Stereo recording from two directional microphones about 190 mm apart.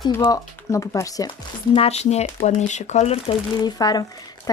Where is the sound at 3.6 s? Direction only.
20° left (ahead or behind).